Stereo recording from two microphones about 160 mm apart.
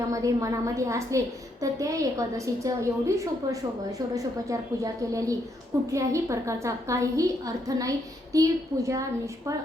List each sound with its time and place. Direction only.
0.1 s a woman's voice: 20° right (ahead or behind)